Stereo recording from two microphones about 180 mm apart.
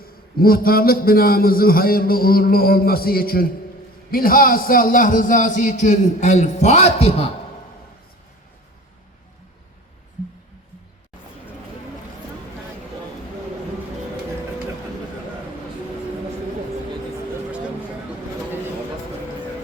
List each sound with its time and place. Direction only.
0.0 s a man's voice: 55° left (ahead or behind); by 7.1 s 35° left (ahead or behind)